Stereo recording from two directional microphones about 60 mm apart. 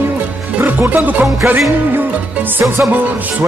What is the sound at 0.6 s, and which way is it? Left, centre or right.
Music, right.